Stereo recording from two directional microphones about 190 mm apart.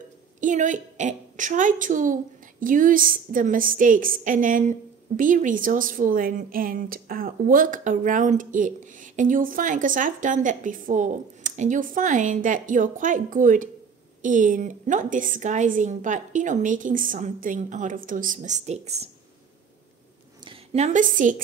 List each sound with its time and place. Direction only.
0.4 s a woman's voice: 40° right (ahead or behind)
20.4 s a woman's voice: 35° right (ahead or behind)